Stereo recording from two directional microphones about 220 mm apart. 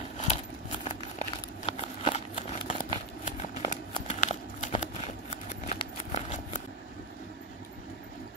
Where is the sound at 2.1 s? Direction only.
30° left (ahead or behind).